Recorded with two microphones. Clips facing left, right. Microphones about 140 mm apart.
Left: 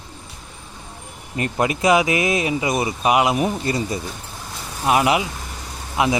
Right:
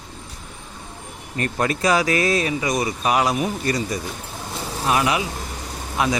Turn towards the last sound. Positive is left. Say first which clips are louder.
# left 2 dB
turn(degrees=20)  # may be behind; listen again after turning